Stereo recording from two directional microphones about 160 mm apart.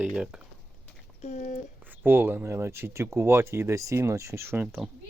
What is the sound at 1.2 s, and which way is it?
Speech, 50° left (ahead or behind).